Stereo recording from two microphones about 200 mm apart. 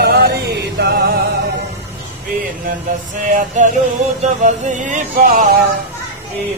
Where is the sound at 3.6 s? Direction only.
35° right (ahead or behind).